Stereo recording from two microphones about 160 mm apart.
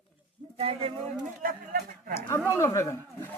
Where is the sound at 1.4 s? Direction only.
60° right (ahead or behind).